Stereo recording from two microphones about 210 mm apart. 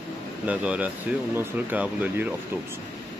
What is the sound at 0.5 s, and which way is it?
Speech, 5° right (ahead or behind).